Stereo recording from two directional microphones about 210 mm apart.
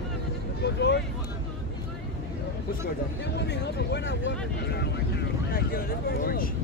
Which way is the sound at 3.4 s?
55° left (ahead or behind).